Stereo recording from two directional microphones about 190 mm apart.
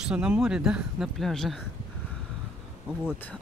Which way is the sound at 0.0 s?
5° right (ahead or behind).